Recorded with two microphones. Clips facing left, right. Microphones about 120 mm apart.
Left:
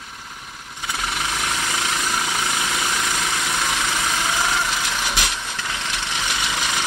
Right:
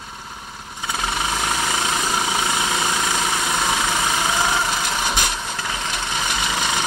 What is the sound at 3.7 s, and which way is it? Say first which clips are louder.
Vehicle: right 3 dB; 45° right (ahead or behind).